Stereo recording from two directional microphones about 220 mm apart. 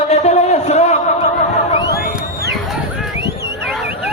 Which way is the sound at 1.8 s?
45° left (ahead or behind).